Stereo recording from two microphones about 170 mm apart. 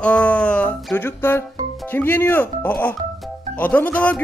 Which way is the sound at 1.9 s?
10° left (ahead or behind).